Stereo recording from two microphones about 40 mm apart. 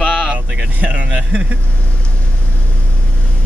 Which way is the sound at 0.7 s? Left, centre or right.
Right.